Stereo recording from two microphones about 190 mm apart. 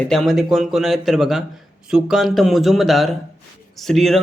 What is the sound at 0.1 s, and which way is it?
Speech, centre (ahead or behind).